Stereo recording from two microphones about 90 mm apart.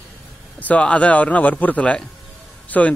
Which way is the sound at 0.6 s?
15° left (ahead or behind).